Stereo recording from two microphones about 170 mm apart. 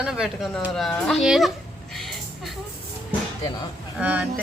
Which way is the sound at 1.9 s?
Centre (ahead or behind).